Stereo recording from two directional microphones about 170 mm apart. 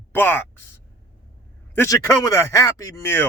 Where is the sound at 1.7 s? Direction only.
15° left (ahead or behind).